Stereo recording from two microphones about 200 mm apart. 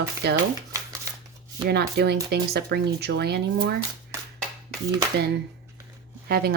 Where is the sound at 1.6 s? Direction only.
55° right (ahead or behind).